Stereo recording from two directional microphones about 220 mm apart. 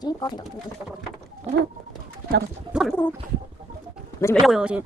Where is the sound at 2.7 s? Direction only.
5° right (ahead or behind).